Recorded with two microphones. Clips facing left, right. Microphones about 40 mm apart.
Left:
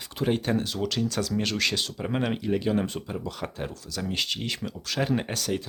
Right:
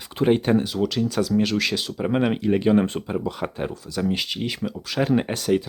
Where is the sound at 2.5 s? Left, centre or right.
Right.